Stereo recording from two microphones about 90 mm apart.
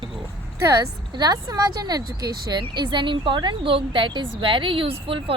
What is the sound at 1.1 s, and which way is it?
Speech, 50° right (ahead or behind).